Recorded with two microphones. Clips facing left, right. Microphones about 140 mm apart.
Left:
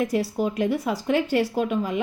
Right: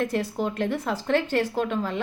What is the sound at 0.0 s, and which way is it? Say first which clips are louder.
A woman's voice: left 2 dB; 10° left (ahead or behind).